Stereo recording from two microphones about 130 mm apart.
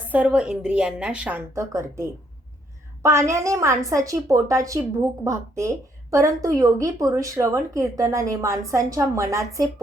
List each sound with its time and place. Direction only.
0.1 s a woman's voice: 10° right (ahead or behind)
1.5 s a woman's voice: 20° right (ahead or behind)